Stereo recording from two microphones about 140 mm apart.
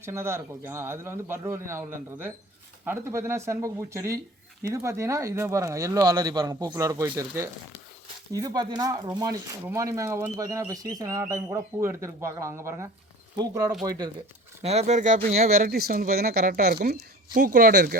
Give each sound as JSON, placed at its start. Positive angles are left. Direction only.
{"t": 0.0, "sound": "a man's voice", "side_deg": -20}
{"t": 14.6, "sound": "speech", "side_deg": -50}
{"t": 15.6, "sound": "speech", "side_deg": -90}